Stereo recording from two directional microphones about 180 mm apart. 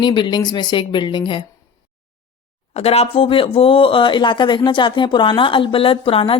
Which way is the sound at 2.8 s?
35° left (ahead or behind).